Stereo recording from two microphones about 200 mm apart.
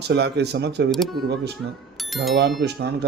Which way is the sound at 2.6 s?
55° right (ahead or behind).